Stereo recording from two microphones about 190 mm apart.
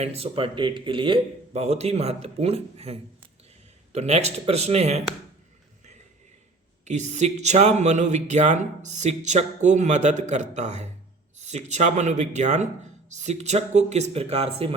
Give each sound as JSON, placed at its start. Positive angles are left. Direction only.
{"t": 0.0, "sound": "speech", "side_deg": -30}
{"t": 6.8, "sound": "speech", "side_deg": -35}